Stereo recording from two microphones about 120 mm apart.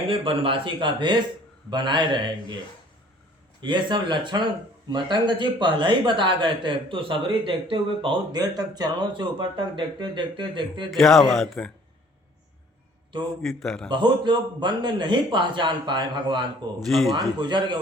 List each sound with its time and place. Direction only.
0.1 s a man's voice: 45° right (ahead or behind)
3.6 s a man's voice: 40° right (ahead or behind)
10.9 s speech: centre (ahead or behind)
13.4 s speech: centre (ahead or behind)
13.9 s a man's voice: 40° right (ahead or behind)